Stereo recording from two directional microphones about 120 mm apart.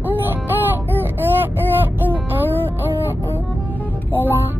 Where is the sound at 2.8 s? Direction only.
15° right (ahead or behind).